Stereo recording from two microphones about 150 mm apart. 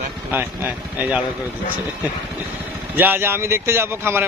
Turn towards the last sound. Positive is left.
turn(degrees=-15)  # may be behind; listen again after turning